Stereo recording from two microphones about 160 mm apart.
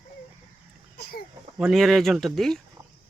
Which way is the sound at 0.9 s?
85° left.